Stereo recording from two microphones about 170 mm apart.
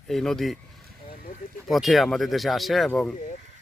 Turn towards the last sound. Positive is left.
turn(degrees=5)  # may be behind; listen again after turning